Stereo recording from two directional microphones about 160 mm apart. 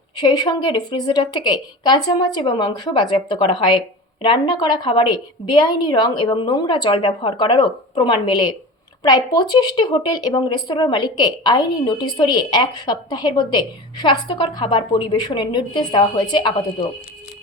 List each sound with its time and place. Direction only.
0.2 s speech: 25° left (ahead or behind)